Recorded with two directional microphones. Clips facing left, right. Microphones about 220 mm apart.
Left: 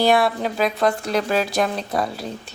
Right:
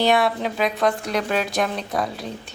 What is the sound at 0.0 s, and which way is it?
A woman's voice, centre (ahead or behind).